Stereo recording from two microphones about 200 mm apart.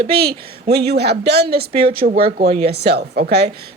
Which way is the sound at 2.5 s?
30° right (ahead or behind).